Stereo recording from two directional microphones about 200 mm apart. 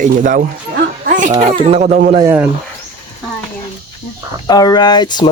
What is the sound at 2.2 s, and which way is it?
Speech, 15° right (ahead or behind).